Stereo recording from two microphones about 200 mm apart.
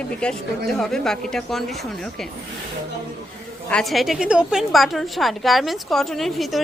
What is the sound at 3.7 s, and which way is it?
A woman's voice, centre (ahead or behind).